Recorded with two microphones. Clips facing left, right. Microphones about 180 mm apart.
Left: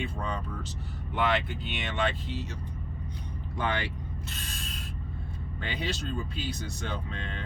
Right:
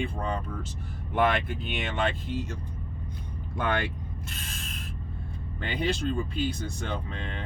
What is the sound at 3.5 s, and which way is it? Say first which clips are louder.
Speech: right 3 dB; 50° right (ahead or behind).